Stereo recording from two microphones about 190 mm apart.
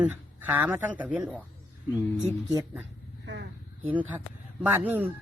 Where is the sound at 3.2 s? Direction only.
75° right (ahead or behind).